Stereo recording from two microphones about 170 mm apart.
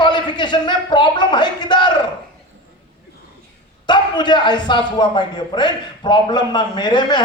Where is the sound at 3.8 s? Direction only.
25° left (ahead or behind).